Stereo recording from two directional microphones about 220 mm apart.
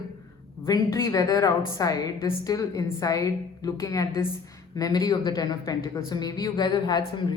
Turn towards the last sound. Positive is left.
turn(degrees=20)  # may be behind; listen again after turning